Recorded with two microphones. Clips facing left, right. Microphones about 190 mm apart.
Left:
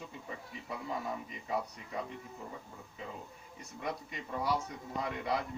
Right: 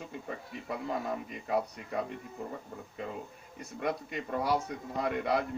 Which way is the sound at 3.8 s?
65° right (ahead or behind).